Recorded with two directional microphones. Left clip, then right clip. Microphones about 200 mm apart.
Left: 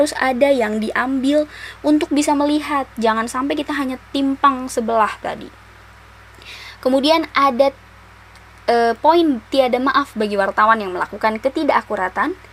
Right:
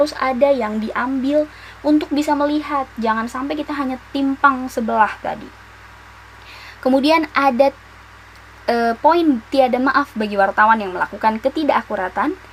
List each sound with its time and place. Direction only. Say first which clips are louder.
0.0 s a woman's voice: even; 35° left (ahead or behind)
6.5 s a woman's voice: even; 20° left (ahead or behind)